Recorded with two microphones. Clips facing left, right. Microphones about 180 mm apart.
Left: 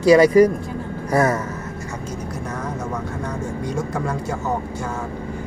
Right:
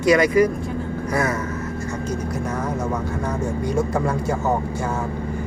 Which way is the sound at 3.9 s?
Centre (ahead or behind).